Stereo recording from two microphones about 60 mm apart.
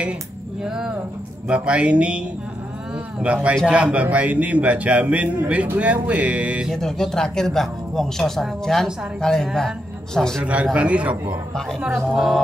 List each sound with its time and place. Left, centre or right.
0.7 s a man's voice: centre
3.6 s a man's voice: centre
6.7 s speech: centre
10.4 s a man's voice: right
11.8 s speech: centre